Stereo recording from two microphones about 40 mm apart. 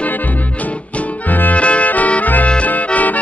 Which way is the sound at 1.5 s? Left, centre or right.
Left.